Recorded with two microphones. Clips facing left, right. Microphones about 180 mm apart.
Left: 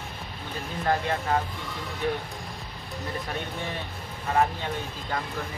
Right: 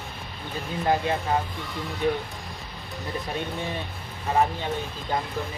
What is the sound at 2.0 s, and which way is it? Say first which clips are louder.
Speech: right 3 dB; 20° right (ahead or behind).